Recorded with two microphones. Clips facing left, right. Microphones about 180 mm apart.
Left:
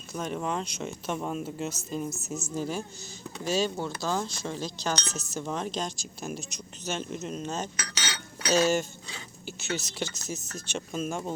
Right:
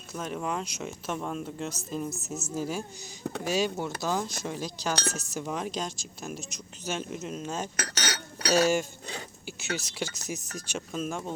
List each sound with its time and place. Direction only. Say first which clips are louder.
0.1 s a woman's voice: left 1 dB; centre (ahead or behind)
3.2 s speech: right 3 dB; 60° right (ahead or behind)
3.5 s speech: left 1 dB; 15° right (ahead or behind)
7.8 s cutlery: right 4 dB; 50° right (ahead or behind)
9.7 s speech: left 1 dB; 10° right (ahead or behind)